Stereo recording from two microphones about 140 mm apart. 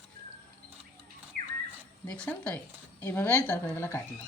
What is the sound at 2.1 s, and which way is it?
Speech, 10° left (ahead or behind).